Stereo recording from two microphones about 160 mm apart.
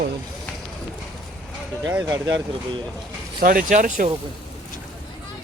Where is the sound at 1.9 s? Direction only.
10° right (ahead or behind).